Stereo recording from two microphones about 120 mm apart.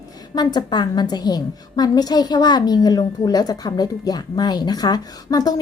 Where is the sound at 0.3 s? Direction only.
40° left (ahead or behind).